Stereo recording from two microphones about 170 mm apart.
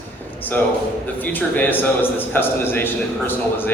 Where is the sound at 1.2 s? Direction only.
10° left (ahead or behind).